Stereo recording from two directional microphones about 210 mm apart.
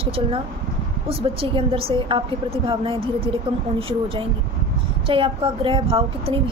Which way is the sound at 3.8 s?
25° right (ahead or behind).